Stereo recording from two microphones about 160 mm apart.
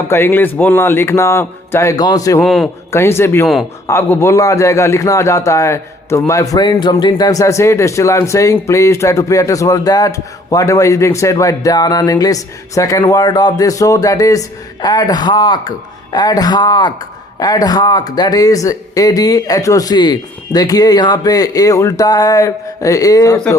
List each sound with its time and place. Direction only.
0.1 s speech: 15° left (ahead or behind)
2.4 s a man's voice: centre (ahead or behind)
2.9 s speech: 15° left (ahead or behind)
3.4 s a man's voice: centre (ahead or behind)
3.8 s a man's voice: 15° left (ahead or behind)